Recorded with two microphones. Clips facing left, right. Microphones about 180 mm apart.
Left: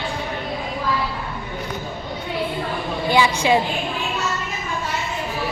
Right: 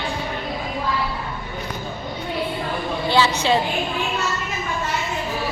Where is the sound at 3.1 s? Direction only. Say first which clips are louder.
Left 1 dB; 15° left (ahead or behind).